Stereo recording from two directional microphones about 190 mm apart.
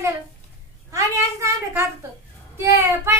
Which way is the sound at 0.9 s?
15° right (ahead or behind).